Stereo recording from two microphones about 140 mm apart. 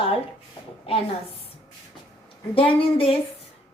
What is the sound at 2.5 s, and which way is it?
Speech, 40° left (ahead or behind).